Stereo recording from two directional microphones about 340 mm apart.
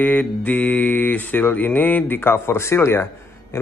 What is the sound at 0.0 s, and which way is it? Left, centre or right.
Mantra, centre.